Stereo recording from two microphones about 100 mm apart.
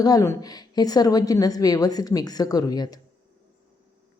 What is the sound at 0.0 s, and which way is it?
Speech, 40° left (ahead or behind).